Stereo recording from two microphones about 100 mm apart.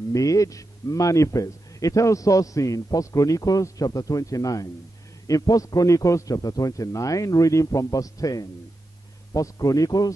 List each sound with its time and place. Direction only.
0.1 s a man's voice: 35° left (ahead or behind)